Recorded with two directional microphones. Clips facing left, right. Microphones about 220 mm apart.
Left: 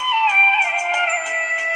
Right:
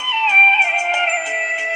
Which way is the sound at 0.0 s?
25° right (ahead or behind).